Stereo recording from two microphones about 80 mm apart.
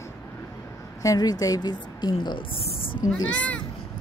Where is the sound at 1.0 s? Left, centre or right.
Left.